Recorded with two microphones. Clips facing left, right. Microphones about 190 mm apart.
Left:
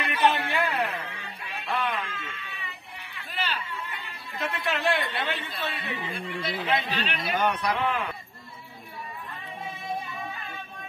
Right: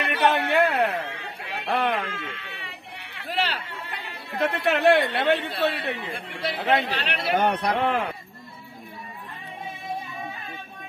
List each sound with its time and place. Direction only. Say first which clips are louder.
0.0 s speech: right 2 dB; 65° right (ahead or behind)